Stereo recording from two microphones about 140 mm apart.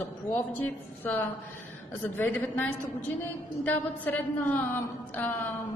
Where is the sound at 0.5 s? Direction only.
15° left (ahead or behind).